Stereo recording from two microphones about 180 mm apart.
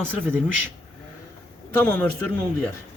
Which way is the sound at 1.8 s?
10° left (ahead or behind).